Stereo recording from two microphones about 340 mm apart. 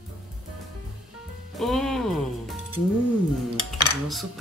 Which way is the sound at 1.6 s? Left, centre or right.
Centre.